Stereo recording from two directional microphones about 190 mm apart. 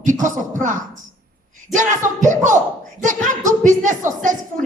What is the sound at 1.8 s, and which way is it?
A woman's voice, 40° right (ahead or behind).